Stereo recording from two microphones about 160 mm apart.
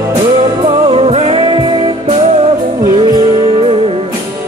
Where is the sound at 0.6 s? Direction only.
35° right (ahead or behind).